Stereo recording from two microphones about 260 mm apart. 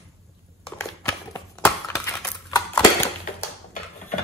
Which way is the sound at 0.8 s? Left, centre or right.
Centre.